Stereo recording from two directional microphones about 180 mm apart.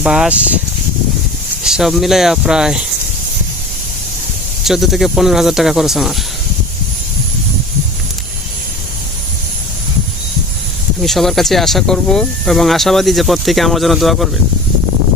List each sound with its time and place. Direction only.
0.0 s speech: 5° right (ahead or behind)
1.6 s speech: centre (ahead or behind)
4.6 s speech: centre (ahead or behind)
11.0 s speech: centre (ahead or behind)